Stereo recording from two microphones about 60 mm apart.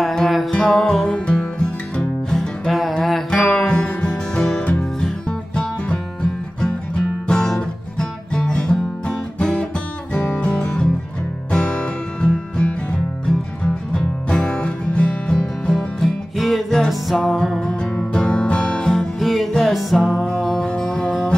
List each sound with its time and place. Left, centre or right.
0.0 s music: centre
1.0 s music: centre
2.7 s music: centre
3.3 s music: centre
7.2 s music: centre
13.9 s music: centre
16.0 s music: centre
18.8 s music: centre
20.4 s music: centre